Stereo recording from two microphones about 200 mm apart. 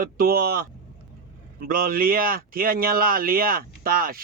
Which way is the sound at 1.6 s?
45° right (ahead or behind).